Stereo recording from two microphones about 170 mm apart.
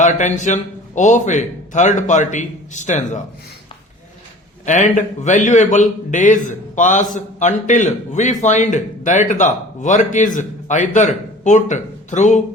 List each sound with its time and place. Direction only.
0.0 s a man's voice: 45° left (ahead or behind)
4.6 s a man's voice: 45° left (ahead or behind)